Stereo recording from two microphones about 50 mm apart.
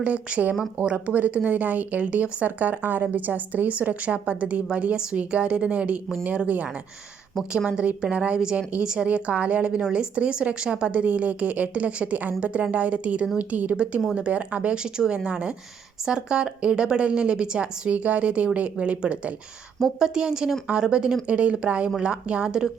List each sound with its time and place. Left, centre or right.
0.0 s a woman's voice: right
7.7 s a woman's voice: right
9.0 s a woman's voice: right
20.0 s a woman's voice: centre